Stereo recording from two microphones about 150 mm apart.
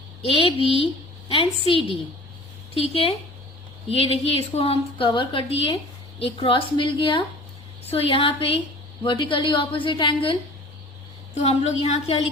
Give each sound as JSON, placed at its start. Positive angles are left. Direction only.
{"t": 0.3, "sound": "a woman's voice", "side_deg": 35}
{"t": 11.3, "sound": "a woman's voice", "side_deg": 50}